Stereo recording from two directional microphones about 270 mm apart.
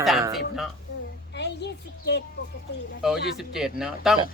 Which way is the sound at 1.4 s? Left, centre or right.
Left.